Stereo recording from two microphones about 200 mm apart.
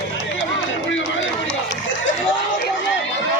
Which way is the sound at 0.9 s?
70° left (ahead or behind).